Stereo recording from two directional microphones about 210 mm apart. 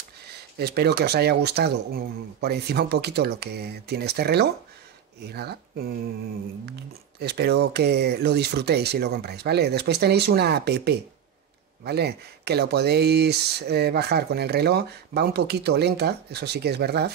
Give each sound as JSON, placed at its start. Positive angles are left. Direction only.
{"t": 0.2, "sound": "speech", "side_deg": -50}